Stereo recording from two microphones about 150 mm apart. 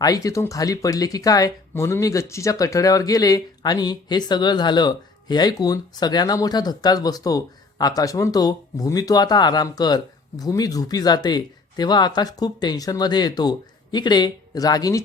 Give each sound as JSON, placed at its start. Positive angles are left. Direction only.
{"t": 0.0, "sound": "speech", "side_deg": 25}